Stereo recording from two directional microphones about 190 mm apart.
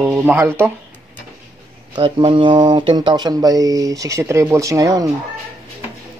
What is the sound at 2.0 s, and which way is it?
Speech, 25° right (ahead or behind).